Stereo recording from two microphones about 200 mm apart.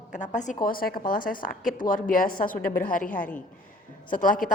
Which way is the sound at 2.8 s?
45° left (ahead or behind).